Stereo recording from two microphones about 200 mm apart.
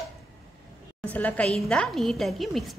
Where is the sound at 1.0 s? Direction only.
5° left (ahead or behind).